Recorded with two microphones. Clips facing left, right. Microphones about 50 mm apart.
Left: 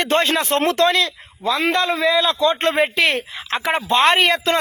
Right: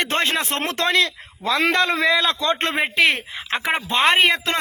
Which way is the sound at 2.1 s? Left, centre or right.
Right.